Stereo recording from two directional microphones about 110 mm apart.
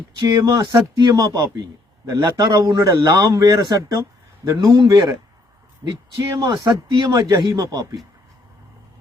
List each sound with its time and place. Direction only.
0.3 s speech: 35° right (ahead or behind)